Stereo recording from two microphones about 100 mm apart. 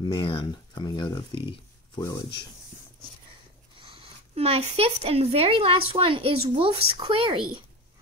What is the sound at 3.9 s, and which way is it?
Speech, 75° right (ahead or behind).